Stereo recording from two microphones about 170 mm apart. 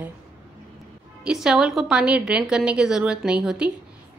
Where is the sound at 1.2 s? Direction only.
5° right (ahead or behind).